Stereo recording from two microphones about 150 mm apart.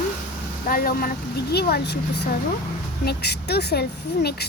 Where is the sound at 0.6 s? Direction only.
80° left.